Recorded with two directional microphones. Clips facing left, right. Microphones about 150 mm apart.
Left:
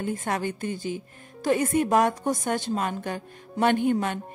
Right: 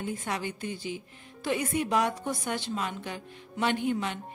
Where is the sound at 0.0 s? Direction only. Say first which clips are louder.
Left 5 dB; 50° left (ahead or behind).